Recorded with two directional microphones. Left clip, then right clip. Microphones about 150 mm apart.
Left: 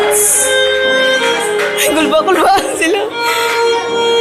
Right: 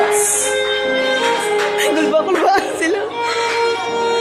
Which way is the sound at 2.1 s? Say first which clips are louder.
Left 5 dB; 5° left (ahead or behind).